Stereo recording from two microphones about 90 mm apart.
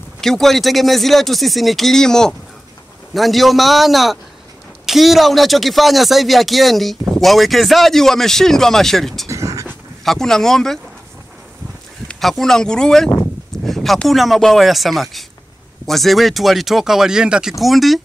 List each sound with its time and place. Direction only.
0.2 s speech: 5° left (ahead or behind)
9.3 s a sound: 35° right (ahead or behind)
10.0 s speech: 5° left (ahead or behind)
12.1 s speech: 5° left (ahead or behind)